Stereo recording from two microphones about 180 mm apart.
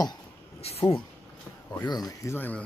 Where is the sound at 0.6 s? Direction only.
35° left (ahead or behind).